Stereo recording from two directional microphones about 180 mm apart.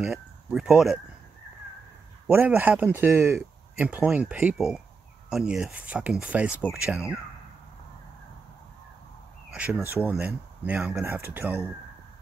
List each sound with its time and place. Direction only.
0.0 s speech: centre (ahead or behind)
2.2 s speech: 10° right (ahead or behind)
10.0 s speech: 10° right (ahead or behind)